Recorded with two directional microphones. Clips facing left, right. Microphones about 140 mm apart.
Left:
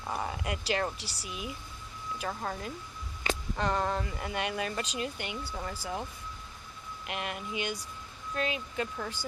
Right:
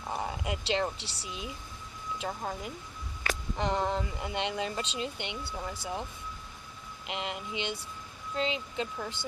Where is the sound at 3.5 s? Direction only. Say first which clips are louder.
Right 1 dB; 20° right (ahead or behind).